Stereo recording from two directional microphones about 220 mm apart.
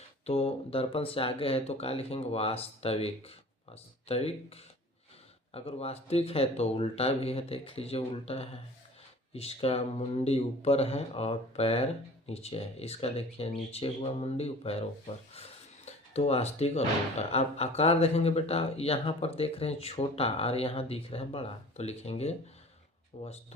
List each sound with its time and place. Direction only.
0.3 s speech: 25° left (ahead or behind)